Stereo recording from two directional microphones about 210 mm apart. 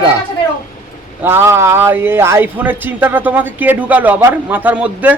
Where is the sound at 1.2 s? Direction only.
10° right (ahead or behind).